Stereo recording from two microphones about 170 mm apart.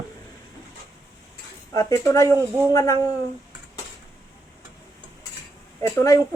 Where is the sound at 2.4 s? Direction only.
15° right (ahead or behind).